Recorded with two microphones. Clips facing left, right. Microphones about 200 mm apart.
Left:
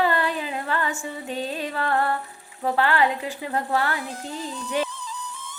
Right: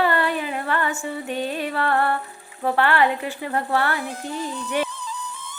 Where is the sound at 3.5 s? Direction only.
15° left (ahead or behind).